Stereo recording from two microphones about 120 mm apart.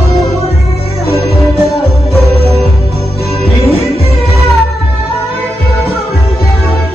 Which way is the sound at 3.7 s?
55° left (ahead or behind).